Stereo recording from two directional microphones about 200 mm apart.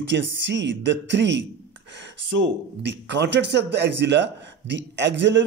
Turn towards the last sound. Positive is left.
turn(degrees=-65)  # may be behind; listen again after turning